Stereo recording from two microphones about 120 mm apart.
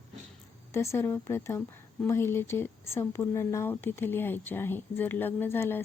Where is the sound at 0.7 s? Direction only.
25° left (ahead or behind).